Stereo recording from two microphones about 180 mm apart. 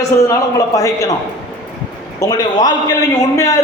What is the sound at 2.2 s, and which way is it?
A man's voice, 20° left (ahead or behind).